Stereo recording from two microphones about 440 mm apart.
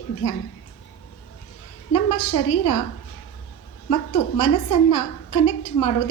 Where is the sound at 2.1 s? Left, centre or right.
Left.